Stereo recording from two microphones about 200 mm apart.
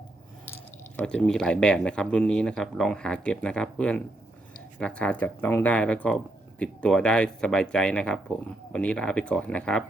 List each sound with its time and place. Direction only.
0.9 s speech: 5° left (ahead or behind)